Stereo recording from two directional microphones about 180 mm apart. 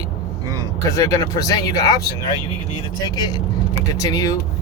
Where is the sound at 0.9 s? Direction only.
20° left (ahead or behind).